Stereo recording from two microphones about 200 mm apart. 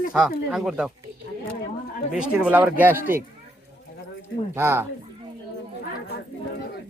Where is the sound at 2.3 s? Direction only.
10° right (ahead or behind).